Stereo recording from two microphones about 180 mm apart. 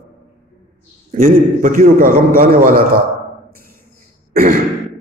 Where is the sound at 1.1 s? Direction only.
50° right (ahead or behind).